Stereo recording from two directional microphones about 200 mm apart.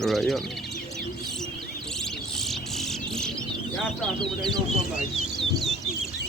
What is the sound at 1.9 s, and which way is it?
Insect, centre (ahead or behind).